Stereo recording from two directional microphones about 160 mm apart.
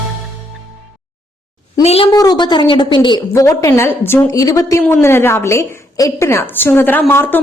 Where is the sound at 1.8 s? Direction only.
40° left (ahead or behind).